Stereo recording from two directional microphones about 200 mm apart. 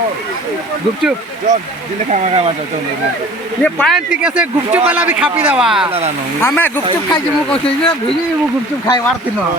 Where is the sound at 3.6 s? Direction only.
5° left (ahead or behind).